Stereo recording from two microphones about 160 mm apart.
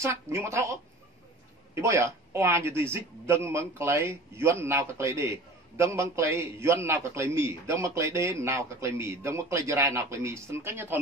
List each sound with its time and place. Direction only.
0.0 s a man's voice: 15° right (ahead or behind)
1.8 s a man's voice: 20° right (ahead or behind)